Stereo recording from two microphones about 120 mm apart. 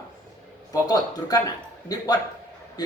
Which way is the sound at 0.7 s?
30° left (ahead or behind).